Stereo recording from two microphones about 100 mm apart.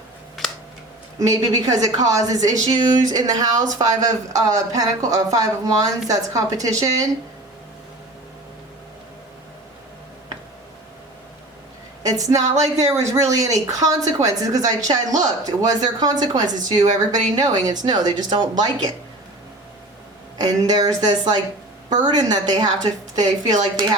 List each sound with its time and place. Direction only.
0.4 s a sound: centre (ahead or behind)
1.3 s a woman's voice: 40° right (ahead or behind)
12.0 s a woman's voice: 35° right (ahead or behind)
20.4 s a woman's voice: 40° right (ahead or behind)